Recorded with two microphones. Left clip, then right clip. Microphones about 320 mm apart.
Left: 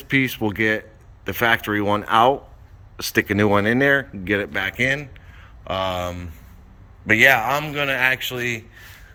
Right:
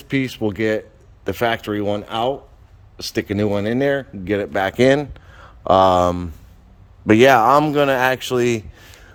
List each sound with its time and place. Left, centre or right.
0.0 s a man's voice: centre; by 8.6 s right